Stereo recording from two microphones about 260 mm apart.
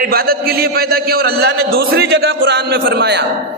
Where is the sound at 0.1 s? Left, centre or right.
Right.